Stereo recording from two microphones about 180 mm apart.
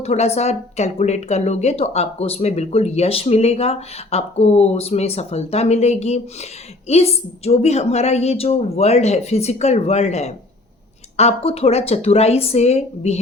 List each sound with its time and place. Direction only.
0.0 s speech: 35° left (ahead or behind)